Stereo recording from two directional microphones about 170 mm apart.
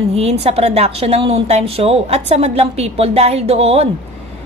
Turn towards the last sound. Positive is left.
turn(degrees=-35)  # may be behind; listen again after turning